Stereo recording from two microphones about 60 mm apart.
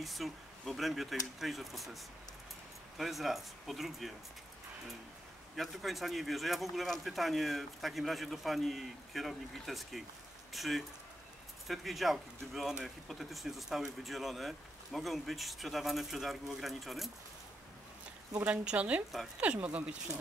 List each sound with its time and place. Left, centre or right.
0.0 s speech: centre
3.0 s speech: centre
5.6 s speech: centre
18.4 s speech: right